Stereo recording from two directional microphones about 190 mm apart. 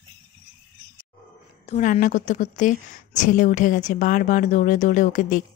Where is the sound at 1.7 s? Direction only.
40° left (ahead or behind).